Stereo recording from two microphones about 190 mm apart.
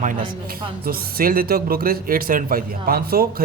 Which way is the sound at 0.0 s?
45° right (ahead or behind).